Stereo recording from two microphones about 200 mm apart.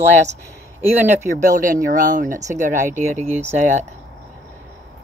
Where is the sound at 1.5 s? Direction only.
45° right (ahead or behind).